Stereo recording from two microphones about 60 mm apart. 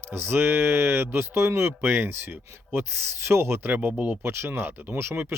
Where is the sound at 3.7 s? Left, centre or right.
Right.